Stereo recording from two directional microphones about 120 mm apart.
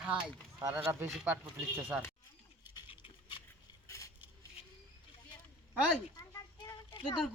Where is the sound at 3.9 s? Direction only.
25° left (ahead or behind).